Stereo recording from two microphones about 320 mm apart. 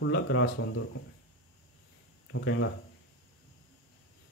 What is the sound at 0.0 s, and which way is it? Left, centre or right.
Speech, left.